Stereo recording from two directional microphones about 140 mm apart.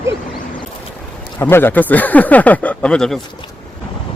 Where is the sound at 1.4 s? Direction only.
15° left (ahead or behind).